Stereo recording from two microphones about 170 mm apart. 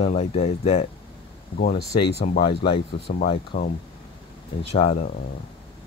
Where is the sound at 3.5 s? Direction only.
55° left (ahead or behind).